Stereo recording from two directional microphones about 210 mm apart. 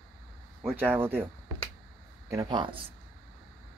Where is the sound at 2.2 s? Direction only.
20° right (ahead or behind).